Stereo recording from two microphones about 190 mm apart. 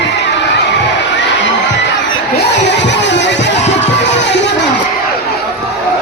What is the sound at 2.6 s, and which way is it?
Music, 65° left (ahead or behind).